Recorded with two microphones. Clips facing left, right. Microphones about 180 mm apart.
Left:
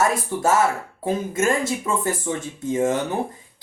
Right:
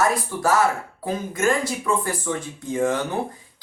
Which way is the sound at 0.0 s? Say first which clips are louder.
Left 1 dB; 25° left (ahead or behind).